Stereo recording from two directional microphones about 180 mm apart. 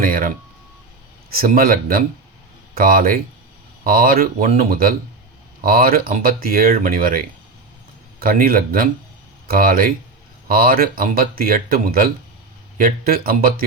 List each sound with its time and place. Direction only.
0.0 s speech: 55° right (ahead or behind)
1.4 s speech: 55° right (ahead or behind)